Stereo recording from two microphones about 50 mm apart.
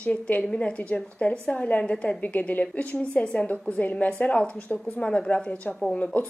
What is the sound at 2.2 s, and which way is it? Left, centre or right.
Speech, left.